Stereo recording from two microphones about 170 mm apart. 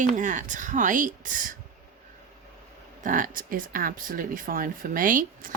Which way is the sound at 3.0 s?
50° right (ahead or behind).